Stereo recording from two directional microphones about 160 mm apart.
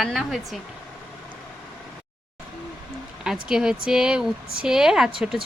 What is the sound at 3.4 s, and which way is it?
A woman's voice, 5° right (ahead or behind).